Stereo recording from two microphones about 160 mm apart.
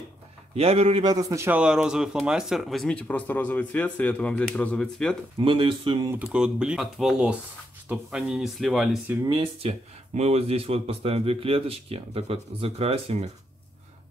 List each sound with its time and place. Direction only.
0.6 s a man's voice: 40° right (ahead or behind)
1.0 s speech: 20° right (ahead or behind); by 5.1 s 5° left (ahead or behind)
5.4 s a man's voice: 30° right (ahead or behind)
6.0 s speech: 10° right (ahead or behind)
9.2 s speech: 25° right (ahead or behind)
9.6 s a man's voice: 40° right (ahead or behind)